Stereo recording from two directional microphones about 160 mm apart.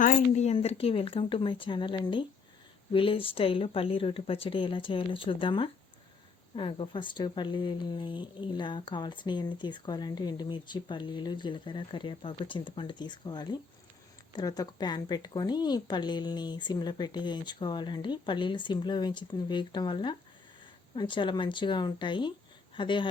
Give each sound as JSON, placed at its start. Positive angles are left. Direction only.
{"t": 0.0, "sound": "speech", "side_deg": 50}